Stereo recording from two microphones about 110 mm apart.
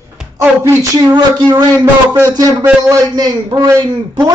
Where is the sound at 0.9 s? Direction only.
40° right (ahead or behind).